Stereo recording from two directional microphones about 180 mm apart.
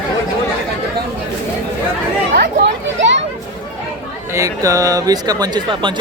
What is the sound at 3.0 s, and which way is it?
Children playing, 90° right.